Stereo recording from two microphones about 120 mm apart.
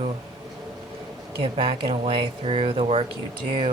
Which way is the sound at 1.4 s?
50° right (ahead or behind).